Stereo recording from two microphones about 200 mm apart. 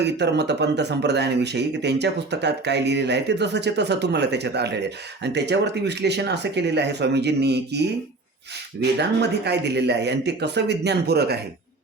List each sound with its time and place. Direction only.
0.0 s speech: 60° right (ahead or behind)